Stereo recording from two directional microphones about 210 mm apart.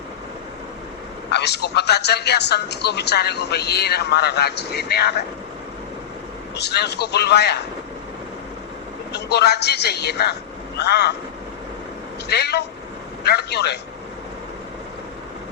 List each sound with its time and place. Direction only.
1.3 s a man's voice: 55° left (ahead or behind)
6.6 s a man's voice: 55° left (ahead or behind)
9.1 s a man's voice: 55° left (ahead or behind)
12.3 s a man's voice: 50° left (ahead or behind)